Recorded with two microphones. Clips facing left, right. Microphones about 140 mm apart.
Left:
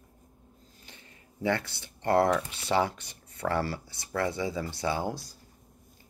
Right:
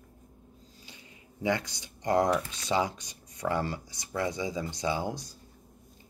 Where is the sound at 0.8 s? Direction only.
15° right (ahead or behind).